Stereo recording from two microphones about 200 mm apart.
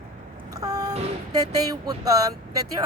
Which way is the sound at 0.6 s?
15° right (ahead or behind).